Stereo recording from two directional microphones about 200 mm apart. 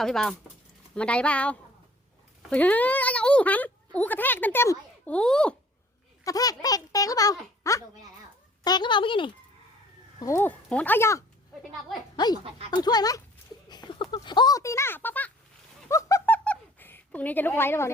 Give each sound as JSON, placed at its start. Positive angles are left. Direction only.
{"t": 0.0, "sound": "speech", "side_deg": 0}
{"t": 6.2, "sound": "a child's voice", "side_deg": 20}
{"t": 10.2, "sound": "a child's voice", "side_deg": 15}
{"t": 15.9, "sound": "a sound", "side_deg": 15}